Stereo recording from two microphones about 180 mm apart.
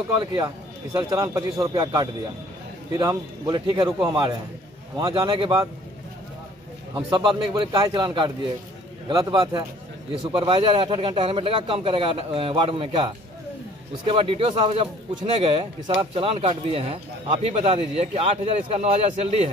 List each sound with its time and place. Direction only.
0.2 s speech: 25° right (ahead or behind)
7.1 s speech: 25° right (ahead or behind)
14.0 s speech: 30° right (ahead or behind)